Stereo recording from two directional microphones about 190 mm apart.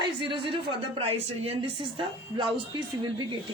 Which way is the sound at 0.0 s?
25° right (ahead or behind).